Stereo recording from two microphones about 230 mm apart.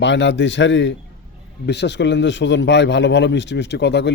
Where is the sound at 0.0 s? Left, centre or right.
Left.